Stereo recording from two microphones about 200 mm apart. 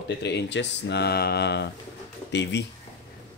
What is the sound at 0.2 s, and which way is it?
Speech, 55° left (ahead or behind).